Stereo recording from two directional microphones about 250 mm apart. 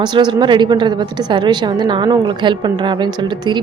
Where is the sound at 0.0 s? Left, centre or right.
Centre.